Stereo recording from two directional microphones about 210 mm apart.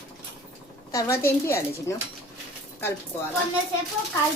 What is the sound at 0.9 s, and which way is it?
A child's voice, 10° left (ahead or behind).